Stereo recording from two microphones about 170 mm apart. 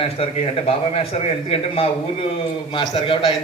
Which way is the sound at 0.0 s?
35° left (ahead or behind).